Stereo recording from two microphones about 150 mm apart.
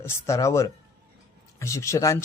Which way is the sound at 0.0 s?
20° left (ahead or behind).